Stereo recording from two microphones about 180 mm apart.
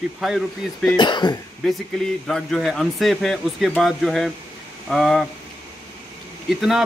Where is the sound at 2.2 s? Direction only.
Centre (ahead or behind).